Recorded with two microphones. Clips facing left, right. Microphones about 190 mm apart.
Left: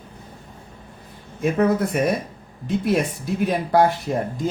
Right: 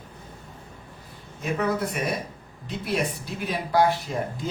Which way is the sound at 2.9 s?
50° left (ahead or behind).